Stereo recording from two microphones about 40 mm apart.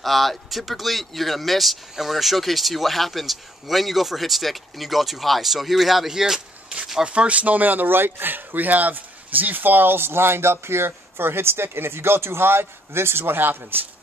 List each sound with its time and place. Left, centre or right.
0.0 s speech: centre
7.1 s speech: right